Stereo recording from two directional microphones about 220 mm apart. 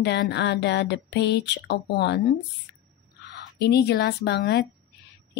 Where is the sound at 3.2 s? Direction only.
50° left (ahead or behind).